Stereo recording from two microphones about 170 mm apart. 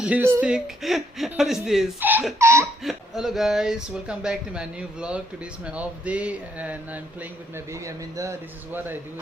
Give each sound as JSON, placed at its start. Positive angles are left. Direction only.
{"t": 0.0, "sound": "speech", "side_deg": -10}
{"t": 2.8, "sound": "speech", "side_deg": 0}